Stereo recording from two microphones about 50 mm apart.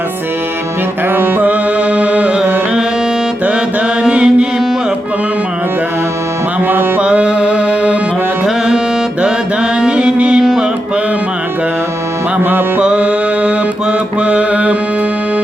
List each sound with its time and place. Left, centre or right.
1.1 s music: right
1.5 s music: right
4.1 s music: right
6.7 s music: right
7.0 s music: right
9.2 s mantra: centre
10.4 s music: centre
12.4 s music: right
12.8 s music: right
14.2 s mantra: right